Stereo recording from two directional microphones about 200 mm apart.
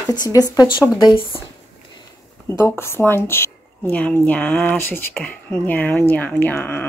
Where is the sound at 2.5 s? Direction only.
10° left (ahead or behind).